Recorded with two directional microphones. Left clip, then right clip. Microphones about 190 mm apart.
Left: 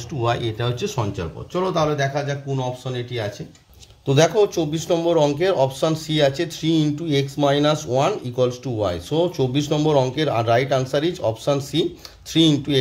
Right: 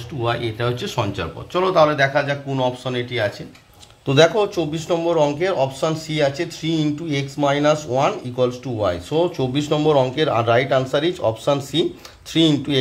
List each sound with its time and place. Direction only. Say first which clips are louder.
0.2 s a man's voice: right 1 dB; 35° left (ahead or behind)
4.0 s a man's voice: right 2 dB; 15° left (ahead or behind)